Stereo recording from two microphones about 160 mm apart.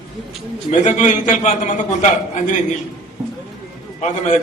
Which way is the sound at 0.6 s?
50° left (ahead or behind).